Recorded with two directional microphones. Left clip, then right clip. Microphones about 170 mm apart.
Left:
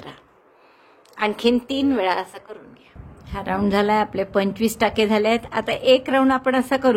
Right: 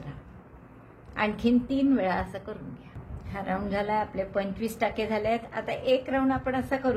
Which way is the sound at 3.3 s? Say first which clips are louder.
Left 9 dB; 40° left (ahead or behind).